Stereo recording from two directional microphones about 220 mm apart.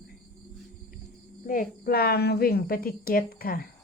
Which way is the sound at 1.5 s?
40° left (ahead or behind).